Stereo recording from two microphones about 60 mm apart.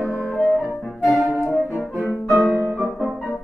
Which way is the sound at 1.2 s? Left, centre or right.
Centre.